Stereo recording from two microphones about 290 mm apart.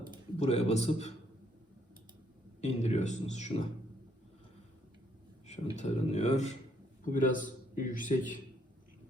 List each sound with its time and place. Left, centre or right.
0.3 s a man's voice: left
2.6 s a man's voice: left
5.7 s a man's voice: left